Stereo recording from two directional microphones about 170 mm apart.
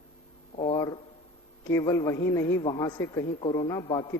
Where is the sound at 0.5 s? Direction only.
30° left (ahead or behind).